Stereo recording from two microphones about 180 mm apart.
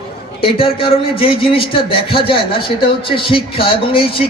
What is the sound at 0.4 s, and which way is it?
A man's voice, 30° left (ahead or behind).